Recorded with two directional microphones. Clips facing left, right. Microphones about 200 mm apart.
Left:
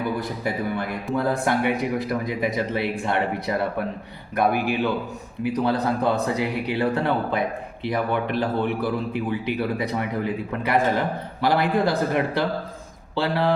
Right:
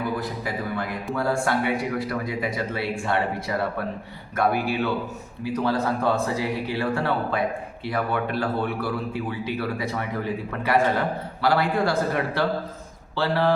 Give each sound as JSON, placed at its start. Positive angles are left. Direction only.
{"t": 0.2, "sound": "a man's voice", "side_deg": 25}
{"t": 11.4, "sound": "a man's voice", "side_deg": 20}